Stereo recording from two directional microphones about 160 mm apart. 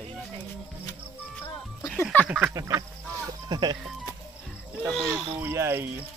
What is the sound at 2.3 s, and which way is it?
Speech, 10° right (ahead or behind).